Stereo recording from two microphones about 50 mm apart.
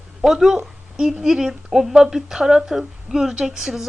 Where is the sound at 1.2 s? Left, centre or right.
Centre.